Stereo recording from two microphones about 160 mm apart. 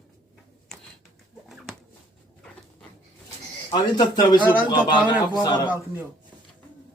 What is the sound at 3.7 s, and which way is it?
Speech, 25° left (ahead or behind).